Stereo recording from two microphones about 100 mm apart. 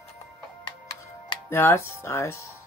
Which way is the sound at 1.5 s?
25° left (ahead or behind).